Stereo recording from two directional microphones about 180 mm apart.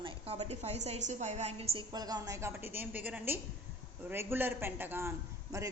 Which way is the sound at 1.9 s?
20° right (ahead or behind).